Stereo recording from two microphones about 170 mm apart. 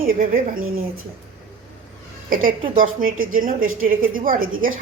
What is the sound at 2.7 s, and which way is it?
A woman's voice, 55° right (ahead or behind).